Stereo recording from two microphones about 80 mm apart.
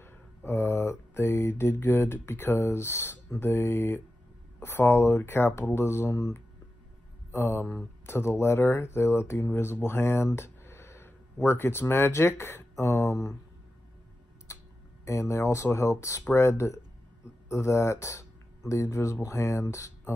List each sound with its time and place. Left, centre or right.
0.0 s mantra: left
4.6 s speech: left
14.5 s a sound: left
15.0 s speech: left